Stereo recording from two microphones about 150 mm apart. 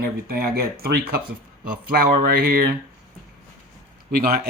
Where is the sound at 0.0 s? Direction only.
85° right.